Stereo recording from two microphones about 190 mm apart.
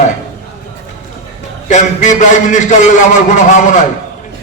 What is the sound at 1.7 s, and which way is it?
A man's voice, 40° left (ahead or behind).